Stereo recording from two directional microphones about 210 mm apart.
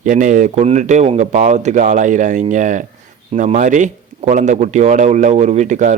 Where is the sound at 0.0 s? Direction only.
35° right (ahead or behind).